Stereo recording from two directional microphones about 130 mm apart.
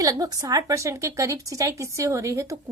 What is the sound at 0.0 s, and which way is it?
A woman's voice, 25° right (ahead or behind).